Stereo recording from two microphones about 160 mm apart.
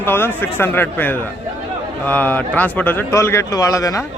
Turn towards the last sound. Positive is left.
turn(degrees=20)  # may be behind; listen again after turning